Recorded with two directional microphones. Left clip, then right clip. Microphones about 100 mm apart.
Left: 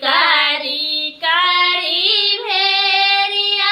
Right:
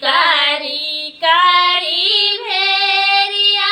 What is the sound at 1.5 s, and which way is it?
Child singing, 45° left (ahead or behind).